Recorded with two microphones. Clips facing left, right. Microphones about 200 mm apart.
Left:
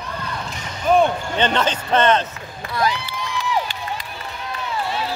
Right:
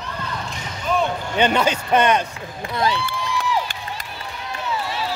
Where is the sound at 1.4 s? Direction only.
10° right (ahead or behind).